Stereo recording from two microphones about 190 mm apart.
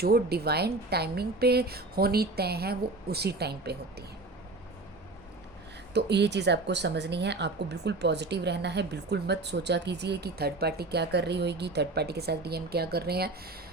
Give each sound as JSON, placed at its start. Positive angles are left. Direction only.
{"t": 0.0, "sound": "speech", "side_deg": -55}
{"t": 5.9, "sound": "speech", "side_deg": -60}